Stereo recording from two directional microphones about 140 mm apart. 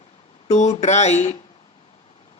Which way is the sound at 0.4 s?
55° left (ahead or behind).